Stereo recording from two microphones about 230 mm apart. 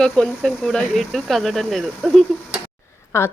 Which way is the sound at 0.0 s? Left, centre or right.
Centre.